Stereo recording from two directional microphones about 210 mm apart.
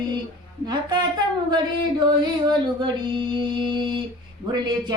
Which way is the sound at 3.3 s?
20° right (ahead or behind).